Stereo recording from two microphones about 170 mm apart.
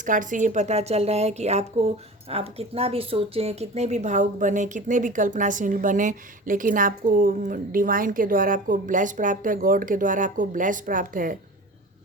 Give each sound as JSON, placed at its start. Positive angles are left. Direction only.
{"t": 0.0, "sound": "a woman's voice", "side_deg": -50}